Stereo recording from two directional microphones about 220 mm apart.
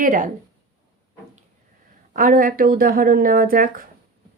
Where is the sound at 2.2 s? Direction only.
40° right (ahead or behind).